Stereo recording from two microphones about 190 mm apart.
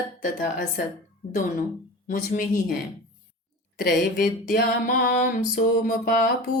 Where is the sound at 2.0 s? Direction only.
45° left (ahead or behind).